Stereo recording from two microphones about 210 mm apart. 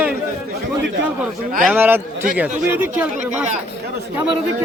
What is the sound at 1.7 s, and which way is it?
A man's voice, 10° right (ahead or behind).